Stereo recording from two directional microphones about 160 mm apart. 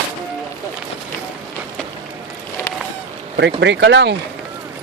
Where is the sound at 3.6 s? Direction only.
90° right.